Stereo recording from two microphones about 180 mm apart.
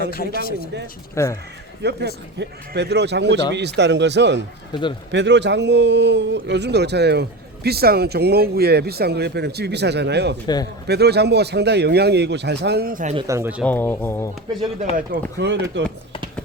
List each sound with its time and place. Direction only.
0.1 s speech: 55° left (ahead or behind)
1.1 s speech: 15° left (ahead or behind)
1.8 s a man's voice: 70° right (ahead or behind)
4.7 s a man's voice: 25° left (ahead or behind)
5.1 s a man's voice: 75° right (ahead or behind)
10.4 s a man's voice: 20° left (ahead or behind)
10.8 s a man's voice: 65° right (ahead or behind); by 13.1 s 50° right (ahead or behind)
13.2 s speech: 15° right (ahead or behind)
13.7 s speech: 10° left (ahead or behind)
15.1 s speech: 50° right (ahead or behind)